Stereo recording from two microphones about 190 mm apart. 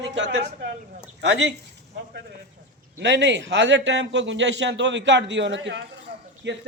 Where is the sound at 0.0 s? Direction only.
65° right (ahead or behind).